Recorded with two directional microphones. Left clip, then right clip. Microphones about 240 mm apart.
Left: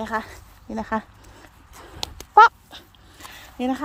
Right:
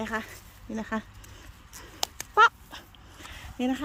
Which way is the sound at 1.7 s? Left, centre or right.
Centre.